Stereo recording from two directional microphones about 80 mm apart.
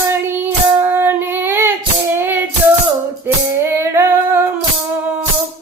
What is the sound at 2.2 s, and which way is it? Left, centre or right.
Music, right.